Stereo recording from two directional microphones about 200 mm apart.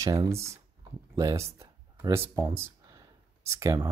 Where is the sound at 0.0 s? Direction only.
20° right (ahead or behind).